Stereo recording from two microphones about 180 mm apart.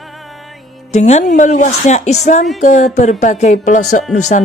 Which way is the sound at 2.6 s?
40° left (ahead or behind).